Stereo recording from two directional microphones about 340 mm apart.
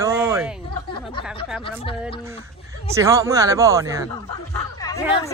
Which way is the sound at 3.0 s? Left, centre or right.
Centre.